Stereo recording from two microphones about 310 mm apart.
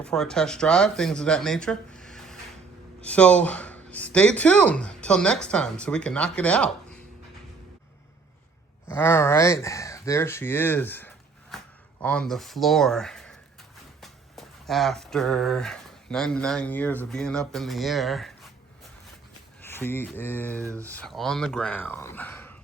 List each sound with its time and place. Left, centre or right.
0.0 s speech: centre
8.9 s speech: centre
19.6 s speech: centre
20.6 s speech: centre
20.8 s speech: centre